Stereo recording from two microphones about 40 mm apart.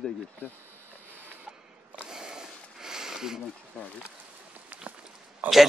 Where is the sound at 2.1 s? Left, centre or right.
Centre.